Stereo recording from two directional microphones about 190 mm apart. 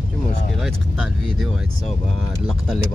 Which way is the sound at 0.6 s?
Centre (ahead or behind).